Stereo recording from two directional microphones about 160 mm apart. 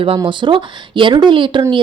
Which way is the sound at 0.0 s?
30° right (ahead or behind).